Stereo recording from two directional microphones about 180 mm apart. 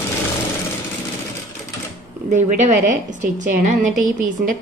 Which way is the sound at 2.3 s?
45° right (ahead or behind).